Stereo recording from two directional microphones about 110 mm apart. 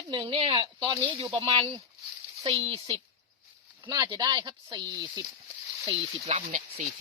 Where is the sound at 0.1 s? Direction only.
45° right (ahead or behind).